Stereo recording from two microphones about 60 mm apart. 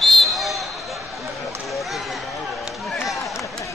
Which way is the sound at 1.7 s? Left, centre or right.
Centre.